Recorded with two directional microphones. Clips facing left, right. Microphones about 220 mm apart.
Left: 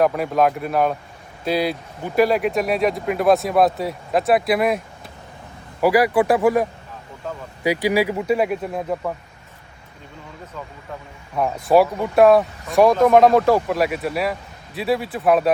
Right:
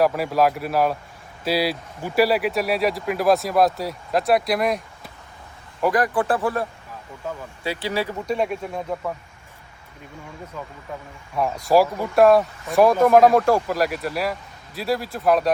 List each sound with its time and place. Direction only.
0.0 s speech: centre (ahead or behind)
5.8 s speech: 10° left (ahead or behind)
7.2 s speech: 10° right (ahead or behind)
7.6 s speech: 15° left (ahead or behind)
11.3 s speech: centre (ahead or behind)